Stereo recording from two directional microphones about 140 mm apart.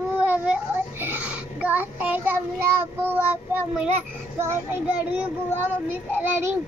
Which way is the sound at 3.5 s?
10° right (ahead or behind).